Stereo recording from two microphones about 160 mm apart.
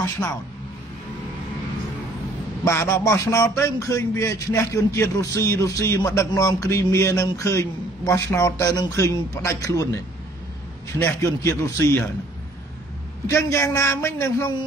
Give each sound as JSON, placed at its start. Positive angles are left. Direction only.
{"t": 0.0, "sound": "a man's voice", "side_deg": 20}
{"t": 2.6, "sound": "a man's voice", "side_deg": 15}
{"t": 11.0, "sound": "a man's voice", "side_deg": 15}
{"t": 13.3, "sound": "a man's voice", "side_deg": 20}